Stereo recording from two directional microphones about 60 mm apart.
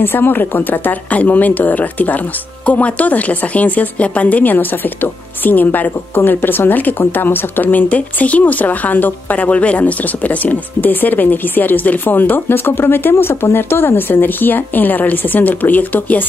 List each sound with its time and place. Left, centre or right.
0.0 s speech: left